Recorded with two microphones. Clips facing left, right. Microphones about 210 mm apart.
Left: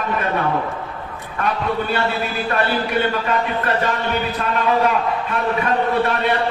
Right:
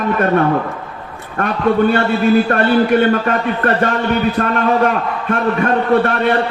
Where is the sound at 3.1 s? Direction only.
50° right (ahead or behind).